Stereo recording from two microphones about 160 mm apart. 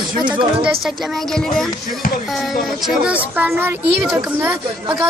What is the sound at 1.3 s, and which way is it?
A man's voice, centre (ahead or behind).